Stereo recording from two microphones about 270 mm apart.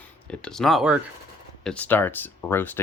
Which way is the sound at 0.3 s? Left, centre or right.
Centre.